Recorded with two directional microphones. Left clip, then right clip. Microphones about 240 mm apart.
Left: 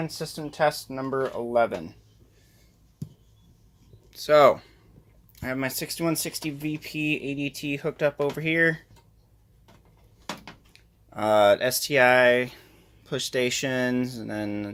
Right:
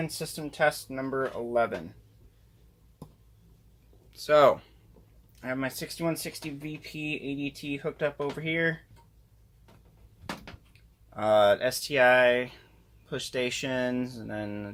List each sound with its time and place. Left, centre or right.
0.0 s speech: centre; by 1.8 s left
4.1 s speech: centre; by 8.8 s left
10.7 s speech: left